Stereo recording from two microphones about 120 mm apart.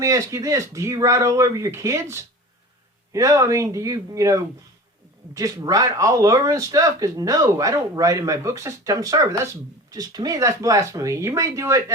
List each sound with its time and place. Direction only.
0.0 s speech: 25° right (ahead or behind)